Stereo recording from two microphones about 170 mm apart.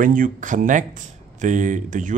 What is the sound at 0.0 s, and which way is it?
Speech, 50° right (ahead or behind).